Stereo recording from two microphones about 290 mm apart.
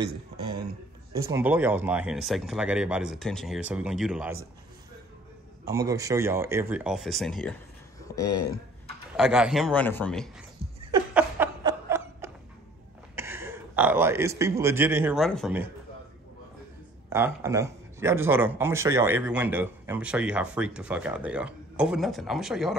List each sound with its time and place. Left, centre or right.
1.1 s speech: centre
5.7 s speech: centre
9.1 s speech: centre
10.9 s a sound: centre
13.1 s a man's voice: centre
17.1 s speech: centre